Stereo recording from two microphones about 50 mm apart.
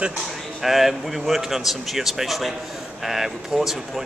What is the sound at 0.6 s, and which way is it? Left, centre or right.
A man's voice, centre.